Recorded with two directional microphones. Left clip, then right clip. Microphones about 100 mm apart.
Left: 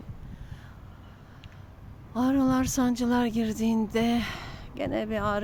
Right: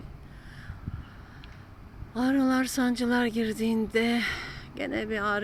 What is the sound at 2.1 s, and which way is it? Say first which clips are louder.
Speech: left 1 dB; 60° left (ahead or behind).